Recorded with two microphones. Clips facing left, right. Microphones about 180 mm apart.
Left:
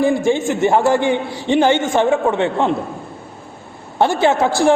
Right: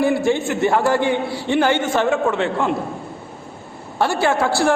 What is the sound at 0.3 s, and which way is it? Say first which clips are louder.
A man's voice: left 2 dB; 15° left (ahead or behind).